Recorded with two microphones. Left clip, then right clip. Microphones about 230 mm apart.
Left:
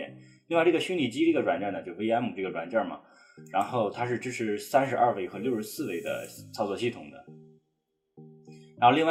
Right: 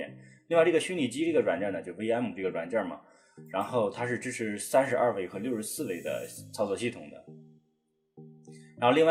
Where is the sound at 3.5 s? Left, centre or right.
Right.